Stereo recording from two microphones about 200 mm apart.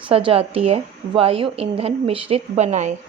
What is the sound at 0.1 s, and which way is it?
A woman's voice, 30° right (ahead or behind).